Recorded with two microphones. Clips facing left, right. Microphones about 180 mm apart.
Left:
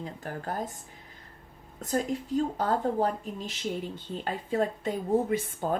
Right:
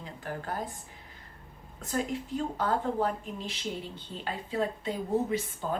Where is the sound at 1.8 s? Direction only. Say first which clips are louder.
Left 3 dB; 40° left (ahead or behind).